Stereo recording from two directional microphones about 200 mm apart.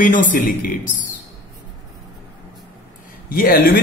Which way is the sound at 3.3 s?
45° left (ahead or behind).